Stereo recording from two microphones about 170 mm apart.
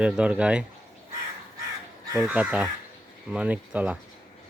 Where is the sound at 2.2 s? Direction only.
10° right (ahead or behind).